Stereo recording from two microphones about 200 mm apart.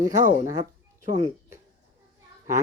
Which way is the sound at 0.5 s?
20° right (ahead or behind).